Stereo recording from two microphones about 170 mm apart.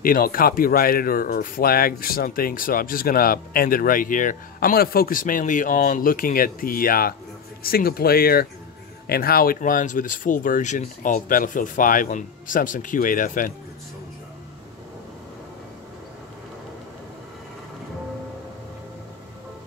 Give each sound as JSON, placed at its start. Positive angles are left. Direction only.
{"t": 0.0, "sound": "speech", "side_deg": 55}